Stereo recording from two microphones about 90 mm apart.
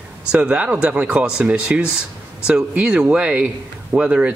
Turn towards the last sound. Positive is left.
turn(degrees=-10)  # may be behind; listen again after turning